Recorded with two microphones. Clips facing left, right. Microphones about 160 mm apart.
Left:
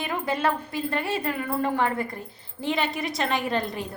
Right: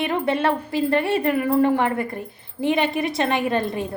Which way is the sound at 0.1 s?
25° right (ahead or behind).